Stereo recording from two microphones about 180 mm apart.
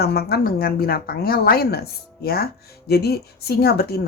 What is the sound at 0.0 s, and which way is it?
A woman's voice, 60° left (ahead or behind).